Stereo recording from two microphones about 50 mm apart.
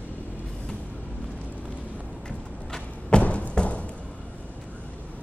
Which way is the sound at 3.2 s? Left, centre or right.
Left.